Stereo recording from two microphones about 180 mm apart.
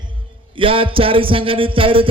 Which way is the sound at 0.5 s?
30° right (ahead or behind).